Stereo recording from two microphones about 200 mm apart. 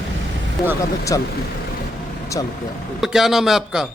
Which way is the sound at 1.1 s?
20° left (ahead or behind).